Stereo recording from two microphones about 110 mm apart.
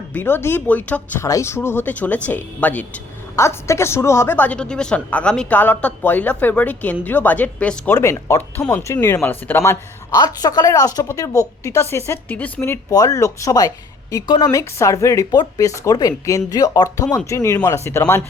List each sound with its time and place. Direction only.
0.1 s a woman's voice: 20° left (ahead or behind)
1.2 s a woman's voice: 25° left (ahead or behind)
3.3 s a woman's voice: 25° left (ahead or behind)
7.9 s speech: 25° left (ahead or behind)
10.2 s speech: 35° left (ahead or behind); by 12.8 s 15° left (ahead or behind)
12.9 s speech: 30° left (ahead or behind)